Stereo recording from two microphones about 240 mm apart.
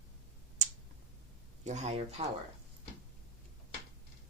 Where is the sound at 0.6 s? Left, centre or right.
Right.